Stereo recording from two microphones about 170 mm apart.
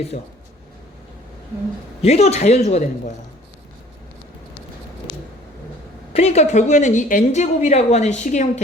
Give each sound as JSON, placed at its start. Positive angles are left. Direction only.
{"t": 2.0, "sound": "a woman's voice", "side_deg": 40}
{"t": 6.1, "sound": "a woman's voice", "side_deg": 40}